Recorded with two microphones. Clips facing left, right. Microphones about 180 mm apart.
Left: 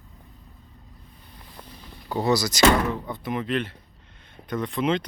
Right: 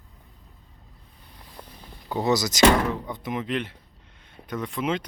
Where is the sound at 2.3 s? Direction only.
20° right (ahead or behind).